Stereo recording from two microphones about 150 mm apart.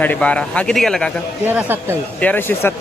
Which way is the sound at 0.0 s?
10° left (ahead or behind).